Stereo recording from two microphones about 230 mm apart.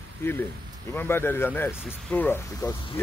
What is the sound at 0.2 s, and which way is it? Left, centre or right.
Speech, centre.